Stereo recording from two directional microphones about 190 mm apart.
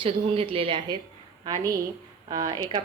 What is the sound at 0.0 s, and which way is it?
A woman's voice, 30° right (ahead or behind).